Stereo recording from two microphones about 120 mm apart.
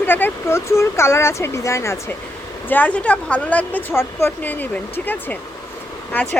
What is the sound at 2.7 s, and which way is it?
Speech, 10° left (ahead or behind).